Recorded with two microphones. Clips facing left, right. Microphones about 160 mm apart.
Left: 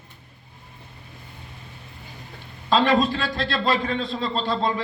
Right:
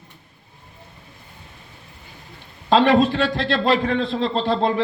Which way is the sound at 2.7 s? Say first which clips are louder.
Right 4 dB; 65° right (ahead or behind).